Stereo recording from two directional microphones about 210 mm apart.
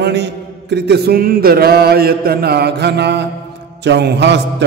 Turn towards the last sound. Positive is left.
turn(degrees=-55)  # may be behind; listen again after turning